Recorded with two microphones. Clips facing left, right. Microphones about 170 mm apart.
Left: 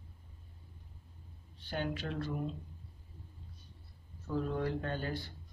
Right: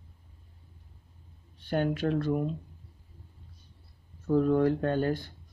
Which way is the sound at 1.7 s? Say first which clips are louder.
Right 10 dB; 50° right (ahead or behind).